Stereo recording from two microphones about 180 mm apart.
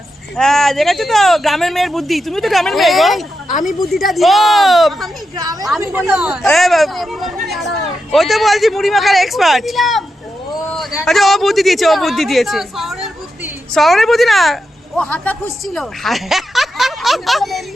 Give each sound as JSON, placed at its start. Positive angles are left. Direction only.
{"t": 0.3, "sound": "speech", "side_deg": 0}
{"t": 5.4, "sound": "a woman's voice", "side_deg": -20}
{"t": 11.0, "sound": "a man's voice", "side_deg": 0}